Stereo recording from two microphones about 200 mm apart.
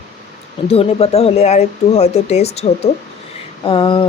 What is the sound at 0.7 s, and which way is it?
Speech, 30° left (ahead or behind).